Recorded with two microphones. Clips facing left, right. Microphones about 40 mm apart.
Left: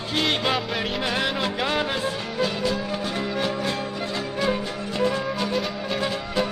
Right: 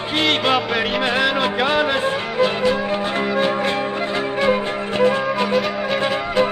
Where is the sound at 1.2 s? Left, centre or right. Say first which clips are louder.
Right 6 dB; right.